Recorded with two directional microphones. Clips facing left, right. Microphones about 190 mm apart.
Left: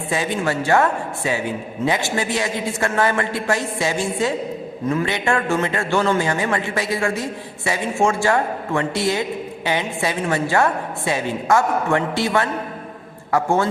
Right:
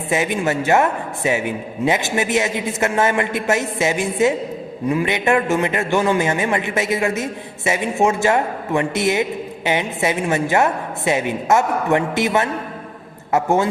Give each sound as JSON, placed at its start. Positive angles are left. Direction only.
{"t": 0.1, "sound": "a man's voice", "side_deg": -20}